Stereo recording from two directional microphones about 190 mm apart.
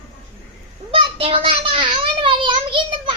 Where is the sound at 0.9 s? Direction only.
30° right (ahead or behind).